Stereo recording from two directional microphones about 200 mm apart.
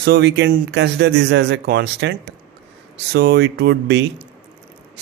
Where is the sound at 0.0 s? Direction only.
55° right (ahead or behind).